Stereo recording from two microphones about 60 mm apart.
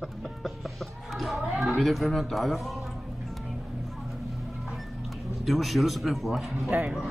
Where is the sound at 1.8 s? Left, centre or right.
Centre.